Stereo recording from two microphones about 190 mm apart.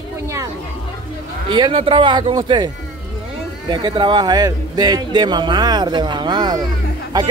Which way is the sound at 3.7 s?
25° right (ahead or behind).